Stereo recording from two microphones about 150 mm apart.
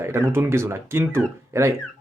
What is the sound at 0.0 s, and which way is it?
A man's voice, 15° right (ahead or behind).